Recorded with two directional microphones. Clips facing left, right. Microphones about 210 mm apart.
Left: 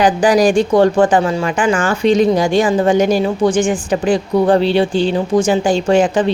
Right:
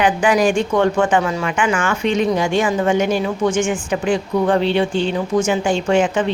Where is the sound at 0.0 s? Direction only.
35° left (ahead or behind).